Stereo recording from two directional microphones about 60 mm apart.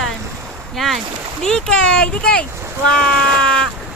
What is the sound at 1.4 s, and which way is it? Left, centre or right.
Speech, centre.